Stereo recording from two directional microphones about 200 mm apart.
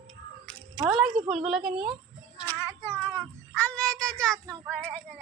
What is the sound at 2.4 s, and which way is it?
Child singing, 10° left (ahead or behind).